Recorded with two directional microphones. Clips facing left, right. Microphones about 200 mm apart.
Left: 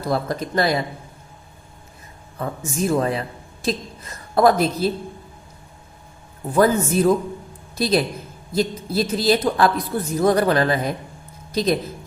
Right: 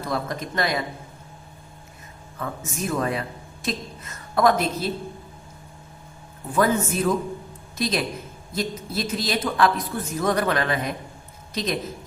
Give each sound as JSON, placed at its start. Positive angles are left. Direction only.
{"t": 0.1, "sound": "speech", "side_deg": 35}
{"t": 2.4, "sound": "a woman's voice", "side_deg": 30}
{"t": 6.5, "sound": "speech", "side_deg": 35}